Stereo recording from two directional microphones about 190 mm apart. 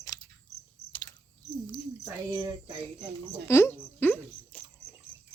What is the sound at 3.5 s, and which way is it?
Speech, 10° left (ahead or behind).